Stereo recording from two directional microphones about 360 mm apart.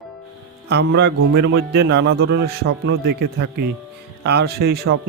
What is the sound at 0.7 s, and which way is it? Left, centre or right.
Speech, right.